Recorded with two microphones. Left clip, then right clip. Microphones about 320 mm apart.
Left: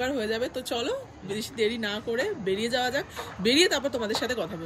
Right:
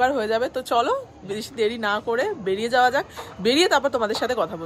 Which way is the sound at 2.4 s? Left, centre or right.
Centre.